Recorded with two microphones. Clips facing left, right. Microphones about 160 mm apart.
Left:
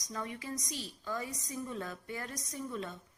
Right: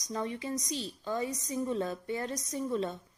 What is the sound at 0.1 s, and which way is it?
A woman's voice, 25° right (ahead or behind).